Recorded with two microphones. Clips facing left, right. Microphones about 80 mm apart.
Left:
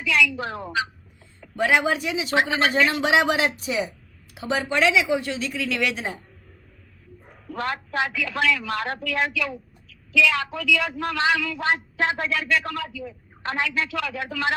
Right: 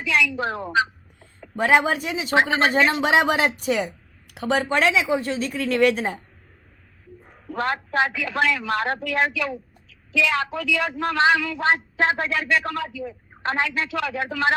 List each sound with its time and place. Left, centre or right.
0.0 s a woman's voice: right
4.8 s a woman's voice: right
7.5 s speech: right